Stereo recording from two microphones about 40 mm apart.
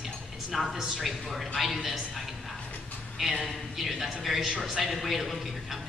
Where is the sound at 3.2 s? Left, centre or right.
Centre.